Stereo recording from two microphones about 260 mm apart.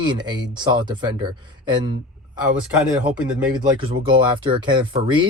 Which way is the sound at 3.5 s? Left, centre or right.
Centre.